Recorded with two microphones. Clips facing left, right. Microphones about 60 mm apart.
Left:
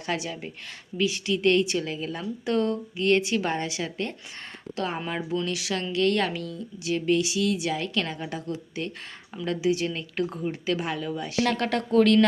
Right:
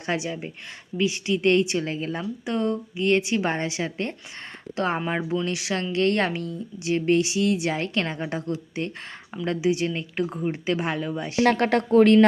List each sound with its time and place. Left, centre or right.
0.0 s speech: right
2.4 s speech: centre